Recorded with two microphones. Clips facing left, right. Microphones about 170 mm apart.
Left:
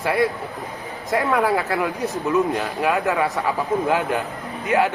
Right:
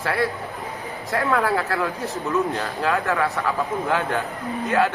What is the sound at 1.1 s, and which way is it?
Speech, 15° left (ahead or behind).